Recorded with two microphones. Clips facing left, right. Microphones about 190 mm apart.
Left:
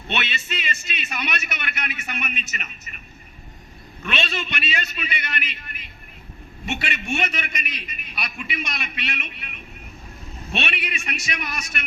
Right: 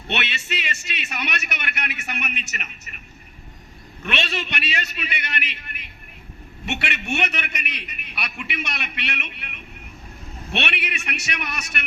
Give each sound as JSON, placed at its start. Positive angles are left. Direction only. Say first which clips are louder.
{"t": 0.1, "sound": "a man's voice", "louder": "even", "side_deg": -65}
{"t": 4.0, "sound": "a man's voice", "louder": "even", "side_deg": -65}